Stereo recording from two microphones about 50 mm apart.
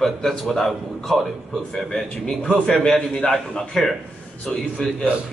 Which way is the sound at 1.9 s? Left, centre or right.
Centre.